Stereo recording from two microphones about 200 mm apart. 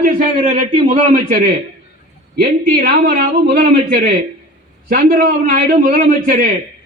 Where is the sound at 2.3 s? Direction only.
50° right (ahead or behind).